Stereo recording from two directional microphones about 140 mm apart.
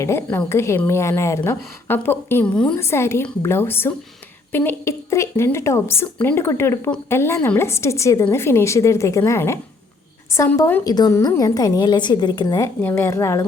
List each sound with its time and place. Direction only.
0.0 s a woman's voice: 20° left (ahead or behind)
2.7 s a woman's voice: 20° left (ahead or behind)
10.8 s a woman's voice: 25° left (ahead or behind)